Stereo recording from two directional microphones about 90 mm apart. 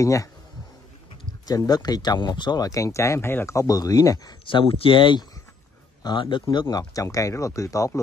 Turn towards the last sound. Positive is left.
turn(degrees=35)  # may be behind; listen again after turning